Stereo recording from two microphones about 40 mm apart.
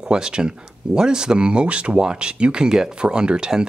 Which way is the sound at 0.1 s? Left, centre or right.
Right.